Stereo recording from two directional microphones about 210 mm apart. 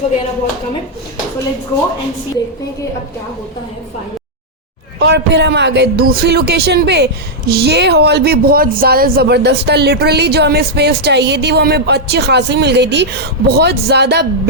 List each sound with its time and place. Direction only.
4.9 s speech: 55° right (ahead or behind)